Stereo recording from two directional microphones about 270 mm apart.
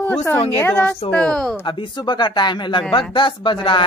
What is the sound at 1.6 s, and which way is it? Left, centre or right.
A man's voice, centre.